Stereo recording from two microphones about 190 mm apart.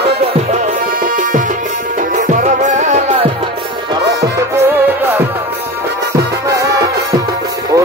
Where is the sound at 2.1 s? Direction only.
40° right (ahead or behind).